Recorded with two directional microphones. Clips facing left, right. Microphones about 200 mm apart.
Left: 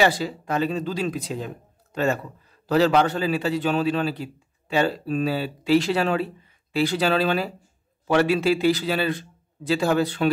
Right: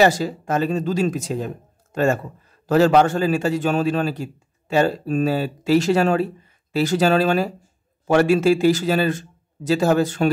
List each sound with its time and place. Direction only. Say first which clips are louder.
0.0 s a man's voice: right 4 dB; 45° right (ahead or behind)